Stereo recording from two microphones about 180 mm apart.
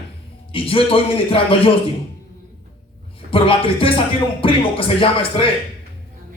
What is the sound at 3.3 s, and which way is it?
Speech, 30° left (ahead or behind).